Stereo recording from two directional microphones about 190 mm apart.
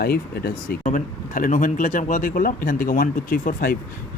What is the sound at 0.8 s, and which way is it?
Speech, 40° left (ahead or behind).